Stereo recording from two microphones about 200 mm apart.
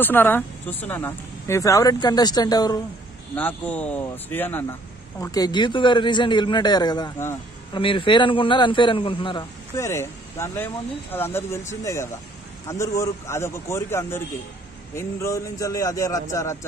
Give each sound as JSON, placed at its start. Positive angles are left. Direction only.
{"t": 0.0, "sound": "speech", "side_deg": 10}
{"t": 3.3, "sound": "a man's voice", "side_deg": 10}